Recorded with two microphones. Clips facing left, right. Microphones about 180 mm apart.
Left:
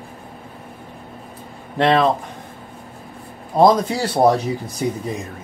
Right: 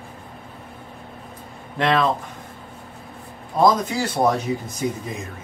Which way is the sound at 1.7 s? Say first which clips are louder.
Left 4 dB; 35° left (ahead or behind).